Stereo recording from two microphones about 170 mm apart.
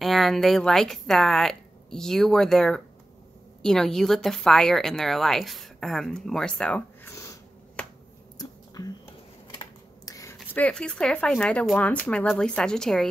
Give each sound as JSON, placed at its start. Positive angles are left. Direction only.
{"t": 0.0, "sound": "a woman's voice", "side_deg": 0}
{"t": 8.4, "sound": "whispering", "side_deg": 20}
{"t": 9.6, "sound": "speech", "side_deg": 20}